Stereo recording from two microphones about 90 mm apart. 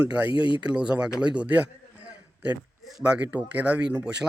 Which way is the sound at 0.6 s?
10° right (ahead or behind).